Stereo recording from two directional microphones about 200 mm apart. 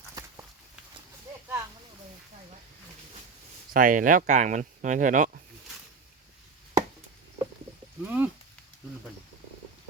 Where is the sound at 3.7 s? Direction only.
40° right (ahead or behind).